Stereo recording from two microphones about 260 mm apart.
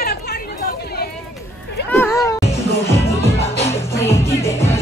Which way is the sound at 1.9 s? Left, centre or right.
Centre.